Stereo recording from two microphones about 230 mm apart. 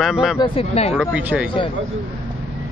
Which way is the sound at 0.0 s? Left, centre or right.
Centre.